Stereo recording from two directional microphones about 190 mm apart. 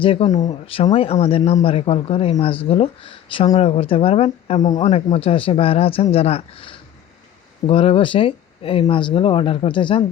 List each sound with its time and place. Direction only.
0.0 s speech: 30° left (ahead or behind)